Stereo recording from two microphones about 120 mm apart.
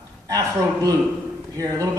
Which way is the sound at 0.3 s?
30° right (ahead or behind).